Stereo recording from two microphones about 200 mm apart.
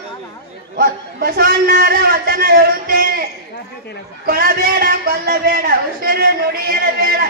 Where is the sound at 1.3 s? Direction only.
50° right (ahead or behind).